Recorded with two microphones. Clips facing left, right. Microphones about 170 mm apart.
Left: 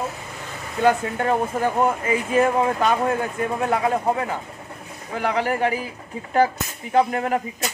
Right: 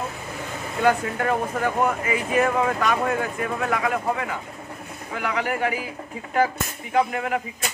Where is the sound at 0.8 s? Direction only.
25° left (ahead or behind).